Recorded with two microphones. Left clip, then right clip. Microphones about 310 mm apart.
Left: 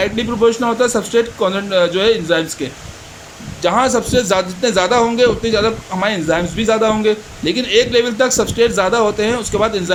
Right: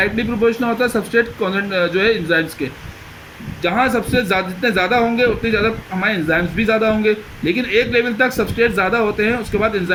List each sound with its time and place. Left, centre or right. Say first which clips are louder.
0.0 s a man's voice: left 2 dB; left
3.6 s a man's voice: left 3 dB; left